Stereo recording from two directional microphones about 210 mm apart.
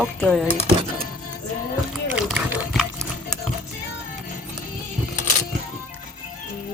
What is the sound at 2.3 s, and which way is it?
Pig, centre (ahead or behind).